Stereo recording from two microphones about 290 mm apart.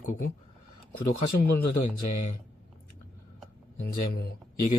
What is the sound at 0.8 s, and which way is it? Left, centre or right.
Speech, left.